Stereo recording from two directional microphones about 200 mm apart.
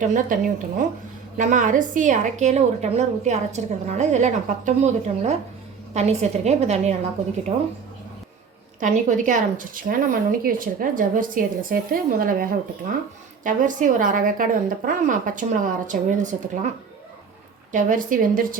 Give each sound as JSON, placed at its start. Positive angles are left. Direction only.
{"t": 0.0, "sound": "a woman's voice", "side_deg": -40}
{"t": 8.8, "sound": "a woman's voice", "side_deg": -40}
{"t": 17.7, "sound": "a woman's voice", "side_deg": -40}